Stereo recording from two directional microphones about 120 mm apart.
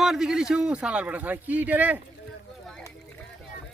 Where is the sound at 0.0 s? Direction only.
5° right (ahead or behind).